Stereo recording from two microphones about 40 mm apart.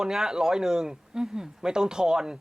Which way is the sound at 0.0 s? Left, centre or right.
Centre.